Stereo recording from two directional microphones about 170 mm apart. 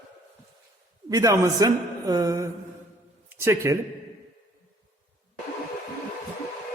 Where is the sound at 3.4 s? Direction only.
15° right (ahead or behind).